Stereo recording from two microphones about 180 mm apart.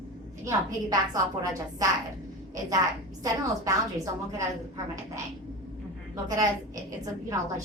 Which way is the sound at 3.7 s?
20° right (ahead or behind).